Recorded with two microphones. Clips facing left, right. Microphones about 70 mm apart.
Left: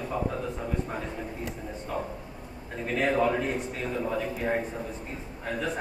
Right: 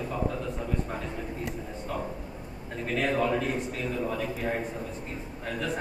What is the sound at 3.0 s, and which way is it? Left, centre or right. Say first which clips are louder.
A man's voice: left 2 dB; centre.